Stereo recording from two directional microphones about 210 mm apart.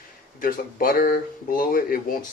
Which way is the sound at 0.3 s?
45° left (ahead or behind).